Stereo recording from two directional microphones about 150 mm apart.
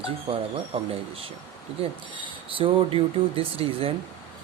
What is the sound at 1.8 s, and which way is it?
Speech, 35° right (ahead or behind).